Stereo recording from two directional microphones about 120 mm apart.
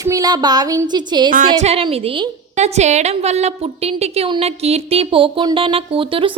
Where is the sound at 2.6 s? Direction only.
70° right (ahead or behind); by 6.3 s 45° right (ahead or behind).